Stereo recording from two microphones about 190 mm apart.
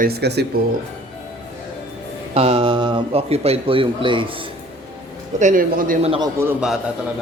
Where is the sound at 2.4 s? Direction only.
30° right (ahead or behind).